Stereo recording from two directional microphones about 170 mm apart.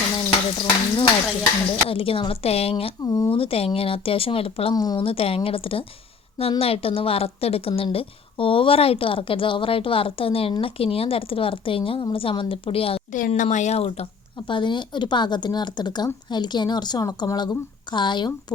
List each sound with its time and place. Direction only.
0.3 s frying: 30° left (ahead or behind)
1.9 s a woman's voice: 35° left (ahead or behind)
3.0 s a woman's voice: 20° left (ahead or behind)
3.2 s a woman's voice: 35° left (ahead or behind)
4.7 s a woman's voice: 20° left (ahead or behind)
13.1 s a woman's voice: 50° left (ahead or behind); by 18.5 s 25° left (ahead or behind)